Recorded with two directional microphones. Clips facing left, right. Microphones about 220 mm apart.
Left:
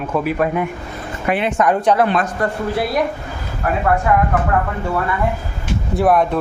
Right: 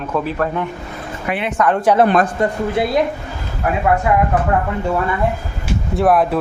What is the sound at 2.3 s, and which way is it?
Speech, 20° right (ahead or behind).